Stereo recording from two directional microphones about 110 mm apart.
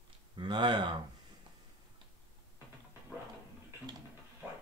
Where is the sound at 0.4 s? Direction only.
45° right (ahead or behind).